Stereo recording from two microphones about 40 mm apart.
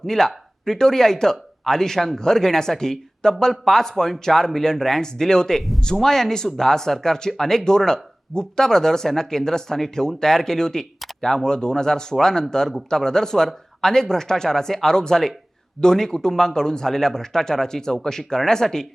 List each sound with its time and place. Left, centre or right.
0.0 s speech: centre